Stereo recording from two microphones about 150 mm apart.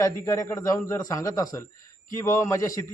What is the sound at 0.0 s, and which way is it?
A man's voice, 20° left (ahead or behind).